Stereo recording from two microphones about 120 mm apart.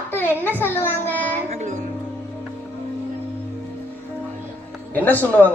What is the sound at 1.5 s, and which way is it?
Speech, 75° right (ahead or behind).